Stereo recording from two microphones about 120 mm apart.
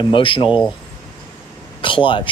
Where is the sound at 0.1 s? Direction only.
45° left (ahead or behind).